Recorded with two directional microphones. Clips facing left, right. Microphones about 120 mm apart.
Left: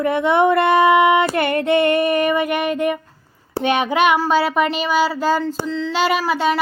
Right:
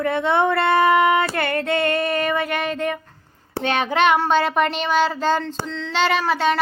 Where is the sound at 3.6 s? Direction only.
15° left (ahead or behind).